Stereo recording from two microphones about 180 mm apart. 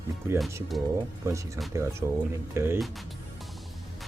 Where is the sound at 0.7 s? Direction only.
Centre (ahead or behind).